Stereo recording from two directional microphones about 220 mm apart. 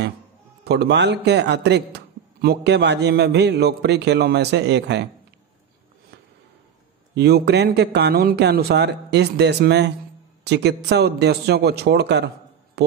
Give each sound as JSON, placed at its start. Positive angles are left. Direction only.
{"t": 0.7, "sound": "a man's voice", "side_deg": -50}
{"t": 7.2, "sound": "a man's voice", "side_deg": -50}